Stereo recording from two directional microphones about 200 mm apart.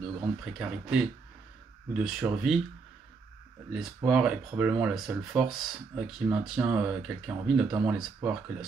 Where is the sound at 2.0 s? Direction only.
Centre (ahead or behind).